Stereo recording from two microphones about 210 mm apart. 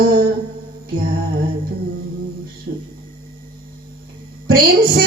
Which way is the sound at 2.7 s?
50° right (ahead or behind).